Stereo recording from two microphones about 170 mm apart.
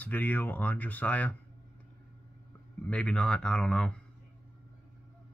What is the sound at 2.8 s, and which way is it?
Speech, 5° left (ahead or behind).